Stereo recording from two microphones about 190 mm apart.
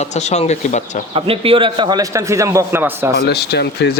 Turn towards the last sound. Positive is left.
turn(degrees=60)  # may be behind; listen again after turning